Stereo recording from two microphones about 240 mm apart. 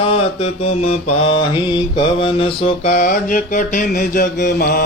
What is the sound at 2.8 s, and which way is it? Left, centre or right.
Mantra, left.